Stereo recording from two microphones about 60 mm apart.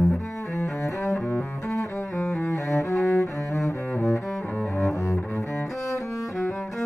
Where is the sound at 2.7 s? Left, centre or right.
Left.